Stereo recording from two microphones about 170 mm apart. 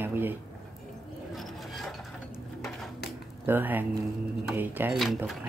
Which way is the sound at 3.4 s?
10° right (ahead or behind).